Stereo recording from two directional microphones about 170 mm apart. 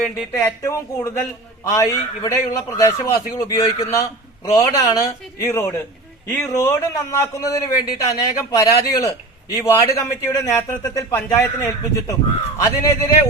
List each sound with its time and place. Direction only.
0.3 s a man's voice: 15° left (ahead or behind)